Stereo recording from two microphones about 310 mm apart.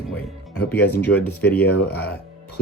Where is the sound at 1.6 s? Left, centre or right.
Left.